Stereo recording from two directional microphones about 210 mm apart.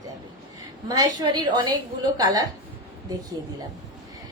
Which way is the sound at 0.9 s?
20° right (ahead or behind).